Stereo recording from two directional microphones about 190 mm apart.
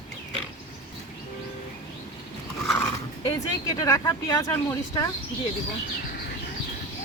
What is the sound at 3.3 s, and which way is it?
Speech, 20° left (ahead or behind).